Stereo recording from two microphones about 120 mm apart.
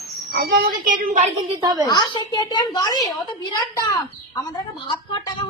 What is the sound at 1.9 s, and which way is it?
A woman's voice, 35° left (ahead or behind).